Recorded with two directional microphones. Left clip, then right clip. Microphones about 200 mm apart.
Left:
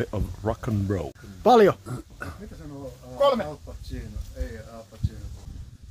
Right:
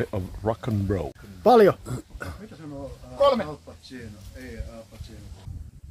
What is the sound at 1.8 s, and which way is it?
Speech, 35° right (ahead or behind).